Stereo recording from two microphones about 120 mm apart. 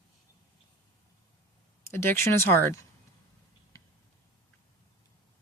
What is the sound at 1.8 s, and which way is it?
Speech, 20° left (ahead or behind).